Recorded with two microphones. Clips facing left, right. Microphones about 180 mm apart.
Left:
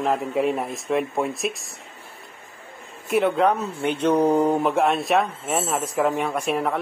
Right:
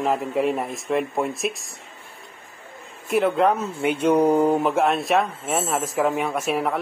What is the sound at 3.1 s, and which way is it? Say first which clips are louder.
Speech: even; centre (ahead or behind).